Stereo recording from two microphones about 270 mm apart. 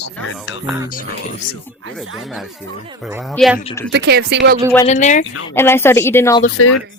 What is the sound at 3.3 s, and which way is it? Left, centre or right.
Speech, centre.